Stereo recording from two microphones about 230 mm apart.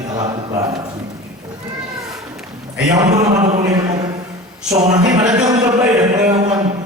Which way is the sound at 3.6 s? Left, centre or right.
Centre.